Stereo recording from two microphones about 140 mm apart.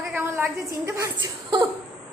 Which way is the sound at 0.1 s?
15° right (ahead or behind).